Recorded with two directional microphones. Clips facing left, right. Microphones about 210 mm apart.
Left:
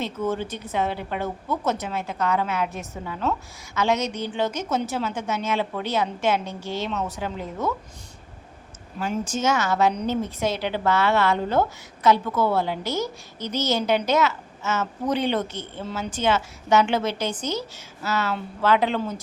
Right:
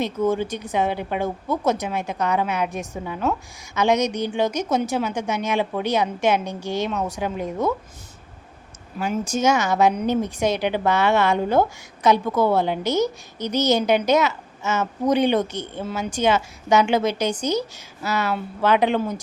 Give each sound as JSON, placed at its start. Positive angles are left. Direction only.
{"t": 0.0, "sound": "a woman's voice", "side_deg": -15}
{"t": 9.3, "sound": "a woman's voice", "side_deg": -15}